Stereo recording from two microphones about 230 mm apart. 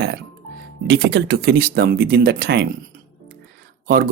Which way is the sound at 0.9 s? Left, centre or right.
Right.